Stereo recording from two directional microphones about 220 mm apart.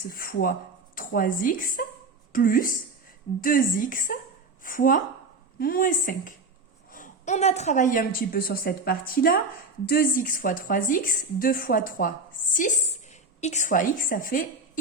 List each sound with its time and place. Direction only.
0.1 s a woman's voice: 40° left (ahead or behind)